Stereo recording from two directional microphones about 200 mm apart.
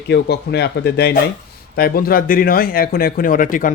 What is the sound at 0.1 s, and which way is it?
A man's voice, 55° left (ahead or behind).